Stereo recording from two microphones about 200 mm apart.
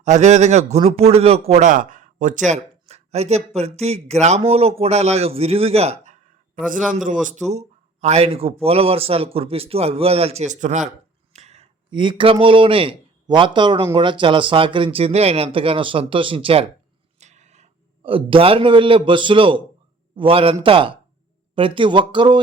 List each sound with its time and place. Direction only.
0.0 s speech: 35° right (ahead or behind)
2.5 s a man's voice: 30° right (ahead or behind)